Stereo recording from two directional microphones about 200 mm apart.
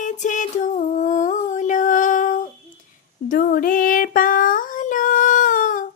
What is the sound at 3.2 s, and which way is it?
Child singing, 45° left (ahead or behind).